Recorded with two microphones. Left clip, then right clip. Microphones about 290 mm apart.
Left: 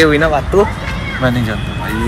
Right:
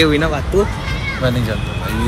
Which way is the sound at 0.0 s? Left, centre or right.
Centre.